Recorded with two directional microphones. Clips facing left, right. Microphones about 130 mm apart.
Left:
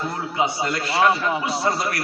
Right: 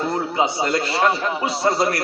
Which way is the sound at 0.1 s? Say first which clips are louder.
Right 3 dB; 35° right (ahead or behind).